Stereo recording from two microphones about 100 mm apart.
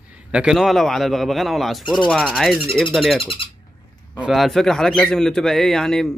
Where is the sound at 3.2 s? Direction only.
60° left (ahead or behind).